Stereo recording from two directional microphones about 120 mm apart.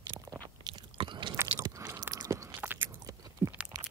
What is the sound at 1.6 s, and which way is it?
Chewing, 20° right (ahead or behind).